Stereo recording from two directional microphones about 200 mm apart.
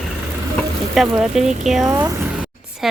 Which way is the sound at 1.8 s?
15° right (ahead or behind).